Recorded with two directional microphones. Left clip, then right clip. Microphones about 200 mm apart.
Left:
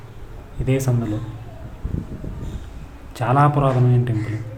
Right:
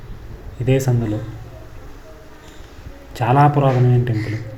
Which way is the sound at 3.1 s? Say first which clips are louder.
Right 3 dB; 5° right (ahead or behind).